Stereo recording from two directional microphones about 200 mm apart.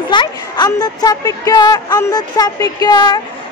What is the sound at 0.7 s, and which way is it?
Speech, 20° left (ahead or behind).